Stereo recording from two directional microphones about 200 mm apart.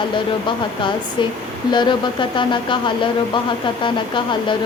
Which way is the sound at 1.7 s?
20° left (ahead or behind).